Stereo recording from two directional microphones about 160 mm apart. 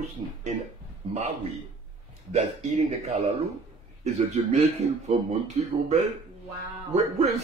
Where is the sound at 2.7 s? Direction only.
40° right (ahead or behind).